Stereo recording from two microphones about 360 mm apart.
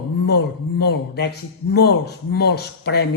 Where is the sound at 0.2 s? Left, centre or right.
Left.